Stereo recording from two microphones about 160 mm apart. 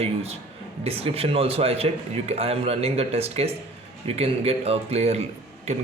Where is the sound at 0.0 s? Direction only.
40° right (ahead or behind).